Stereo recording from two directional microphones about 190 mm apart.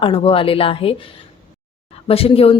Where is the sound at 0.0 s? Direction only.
30° left (ahead or behind).